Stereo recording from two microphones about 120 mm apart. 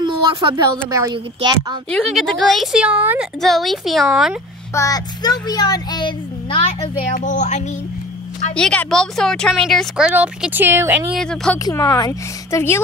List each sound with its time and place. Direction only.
0.0 s speech: 35° right (ahead or behind)
1.1 s speech: 40° right (ahead or behind)
1.9 s a woman's voice: centre (ahead or behind)
3.3 s a woman's voice: centre (ahead or behind)
4.7 s speech: 30° left (ahead or behind)
7.1 s speech: 90° left
8.5 s a woman's voice: 5° left (ahead or behind)
9.9 s speech: 10° right (ahead or behind)
11.1 s a woman's voice: 5° left (ahead or behind)
11.5 s a woman's voice: 25° left (ahead or behind)